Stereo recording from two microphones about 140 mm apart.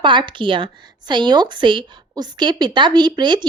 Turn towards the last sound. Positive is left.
turn(degrees=-30)  # may be behind; listen again after turning